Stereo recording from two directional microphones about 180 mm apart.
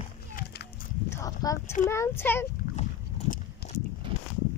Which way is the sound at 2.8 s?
40° left (ahead or behind).